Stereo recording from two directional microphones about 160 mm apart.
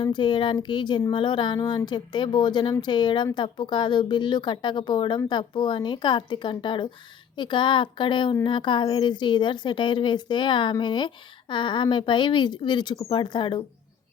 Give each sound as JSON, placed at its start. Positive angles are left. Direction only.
{"t": 0.0, "sound": "a woman's voice", "side_deg": 30}